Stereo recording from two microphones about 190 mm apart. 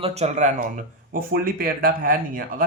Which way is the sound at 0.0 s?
35° right (ahead or behind).